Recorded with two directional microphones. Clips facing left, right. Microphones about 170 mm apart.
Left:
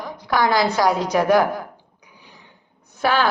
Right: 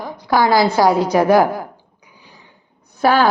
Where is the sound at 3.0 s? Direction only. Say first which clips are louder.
Right 5 dB; 40° right (ahead or behind).